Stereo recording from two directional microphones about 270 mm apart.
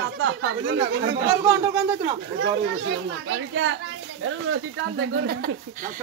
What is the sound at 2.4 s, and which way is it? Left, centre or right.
Speech, right.